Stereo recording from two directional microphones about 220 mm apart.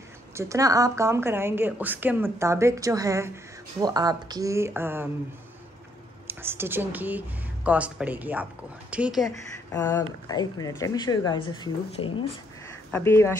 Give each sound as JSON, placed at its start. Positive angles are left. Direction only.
{"t": 0.3, "sound": "a woman's voice", "side_deg": -15}
{"t": 6.2, "sound": "a woman's voice", "side_deg": -10}
{"t": 9.7, "sound": "speech", "side_deg": 15}
{"t": 12.9, "sound": "speech", "side_deg": 10}